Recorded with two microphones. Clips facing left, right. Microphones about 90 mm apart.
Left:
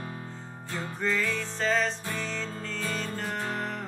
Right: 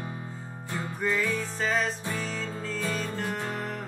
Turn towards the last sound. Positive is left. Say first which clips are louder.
# even
turn(degrees=-5)  # may be behind; listen again after turning